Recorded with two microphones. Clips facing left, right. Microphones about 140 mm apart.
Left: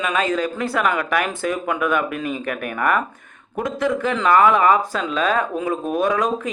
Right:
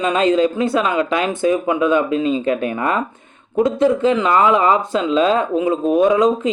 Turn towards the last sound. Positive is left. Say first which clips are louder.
# right 6 dB
turn(degrees=-20)  # may be behind; listen again after turning